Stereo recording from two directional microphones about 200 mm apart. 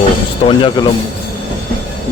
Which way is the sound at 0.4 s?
25° left (ahead or behind).